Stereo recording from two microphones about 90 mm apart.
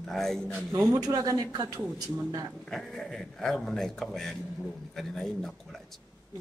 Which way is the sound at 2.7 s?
5° left (ahead or behind).